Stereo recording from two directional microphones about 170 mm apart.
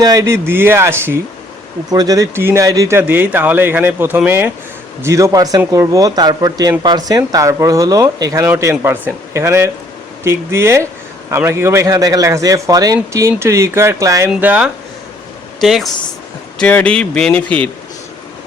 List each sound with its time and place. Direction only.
0.0 s speech: 20° right (ahead or behind)
14.3 s speech: 5° right (ahead or behind)